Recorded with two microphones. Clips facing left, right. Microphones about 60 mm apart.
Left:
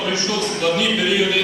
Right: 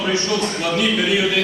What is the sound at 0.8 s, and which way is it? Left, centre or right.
Speech, right.